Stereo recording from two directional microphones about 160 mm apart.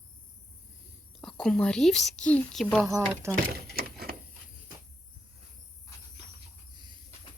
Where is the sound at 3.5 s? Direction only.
75° right (ahead or behind).